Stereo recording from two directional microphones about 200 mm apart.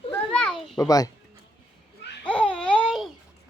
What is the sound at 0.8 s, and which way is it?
Speech, 15° left (ahead or behind).